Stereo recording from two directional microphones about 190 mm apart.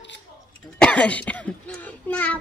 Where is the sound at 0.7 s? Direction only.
5° left (ahead or behind).